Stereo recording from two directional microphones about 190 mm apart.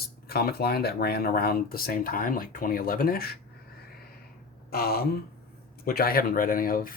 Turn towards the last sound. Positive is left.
turn(degrees=45)  # may be behind; listen again after turning